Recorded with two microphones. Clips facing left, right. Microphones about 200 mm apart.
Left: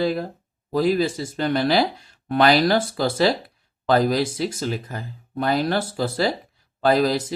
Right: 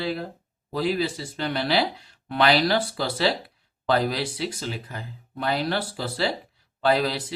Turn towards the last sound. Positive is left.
turn(degrees=45)  # may be behind; listen again after turning